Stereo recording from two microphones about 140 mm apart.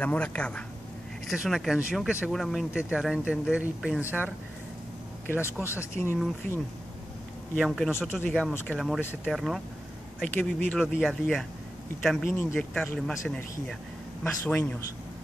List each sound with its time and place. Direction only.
0.0 s speech: 10° left (ahead or behind)
5.4 s speech: 20° left (ahead or behind)
7.5 s speech: centre (ahead or behind)
10.2 s speech: 10° left (ahead or behind)
10.8 s speech: centre (ahead or behind)
14.2 s speech: 15° left (ahead or behind)